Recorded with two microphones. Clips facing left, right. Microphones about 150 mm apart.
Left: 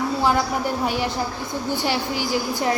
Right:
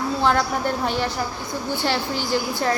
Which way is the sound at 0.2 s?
10° left (ahead or behind).